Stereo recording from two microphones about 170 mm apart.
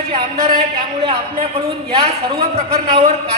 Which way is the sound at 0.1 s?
35° right (ahead or behind).